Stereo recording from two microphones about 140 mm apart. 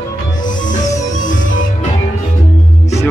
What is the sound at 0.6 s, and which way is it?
Music, 60° left (ahead or behind).